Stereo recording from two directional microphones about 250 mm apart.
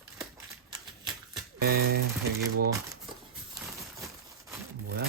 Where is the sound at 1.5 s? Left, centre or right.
Right.